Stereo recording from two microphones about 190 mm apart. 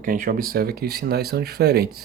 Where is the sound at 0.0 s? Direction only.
45° right (ahead or behind).